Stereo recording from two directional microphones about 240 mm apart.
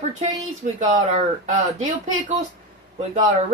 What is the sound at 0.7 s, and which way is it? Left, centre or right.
Speech, right.